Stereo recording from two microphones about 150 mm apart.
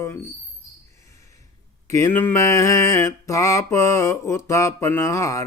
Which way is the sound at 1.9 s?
15° left (ahead or behind).